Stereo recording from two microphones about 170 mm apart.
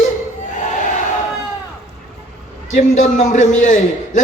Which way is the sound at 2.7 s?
50° left (ahead or behind).